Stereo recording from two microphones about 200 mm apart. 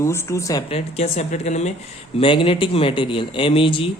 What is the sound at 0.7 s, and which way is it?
Speech, 30° left (ahead or behind).